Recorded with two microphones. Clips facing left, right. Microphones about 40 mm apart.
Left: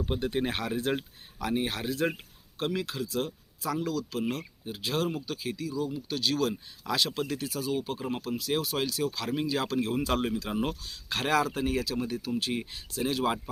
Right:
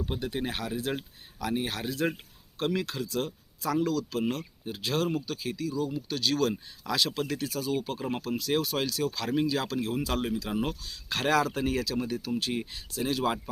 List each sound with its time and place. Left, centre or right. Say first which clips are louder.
0.0 s speech: left 2 dB; centre
0.3 s speech: left 3 dB; left
0.9 s speech: left 2 dB; left
2.6 s speech: right 1 dB; centre
9.5 s speech: left 1 dB; centre
10.5 s speech: even; centre
10.8 s speech: right 2 dB; left